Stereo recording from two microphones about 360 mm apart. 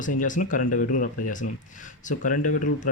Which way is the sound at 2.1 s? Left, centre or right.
Left.